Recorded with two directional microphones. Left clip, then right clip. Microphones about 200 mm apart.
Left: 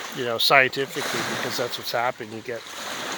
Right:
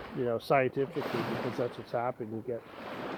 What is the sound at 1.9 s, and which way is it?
Speech, 5° left (ahead or behind).